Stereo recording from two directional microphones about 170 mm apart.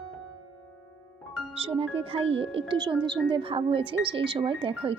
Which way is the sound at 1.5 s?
35° right (ahead or behind).